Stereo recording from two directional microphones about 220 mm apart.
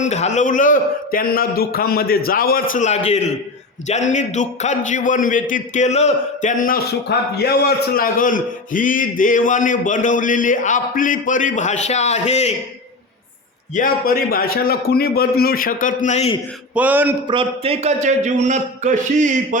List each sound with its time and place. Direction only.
0.0 s a man's voice: 30° left (ahead or behind)
13.7 s a man's voice: 40° left (ahead or behind)
16.7 s a sound: 5° right (ahead or behind)
17.2 s a man's voice: 25° right (ahead or behind)